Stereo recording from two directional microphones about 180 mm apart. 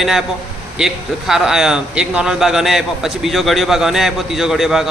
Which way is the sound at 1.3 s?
Centre (ahead or behind).